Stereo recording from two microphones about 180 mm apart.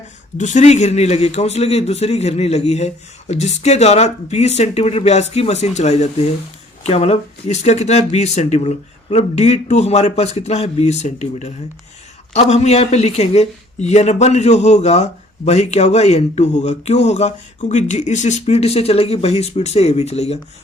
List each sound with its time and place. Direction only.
0.3 s speech: 45° left (ahead or behind)